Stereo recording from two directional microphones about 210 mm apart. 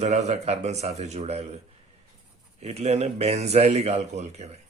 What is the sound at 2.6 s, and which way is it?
Speech, 30° right (ahead or behind).